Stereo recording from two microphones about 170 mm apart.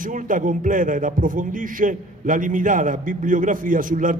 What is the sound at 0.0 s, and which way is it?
A man's voice, 50° right (ahead or behind).